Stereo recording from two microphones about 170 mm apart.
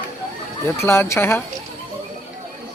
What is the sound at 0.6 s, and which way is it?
Speech, 15° left (ahead or behind).